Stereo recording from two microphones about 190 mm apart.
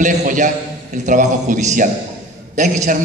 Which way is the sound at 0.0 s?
40° right (ahead or behind).